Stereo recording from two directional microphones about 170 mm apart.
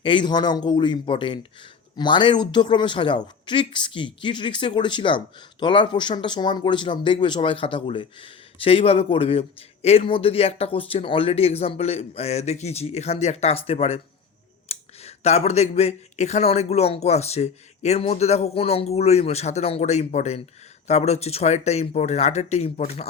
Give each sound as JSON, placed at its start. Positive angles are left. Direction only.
{"t": 0.0, "sound": "speech", "side_deg": 30}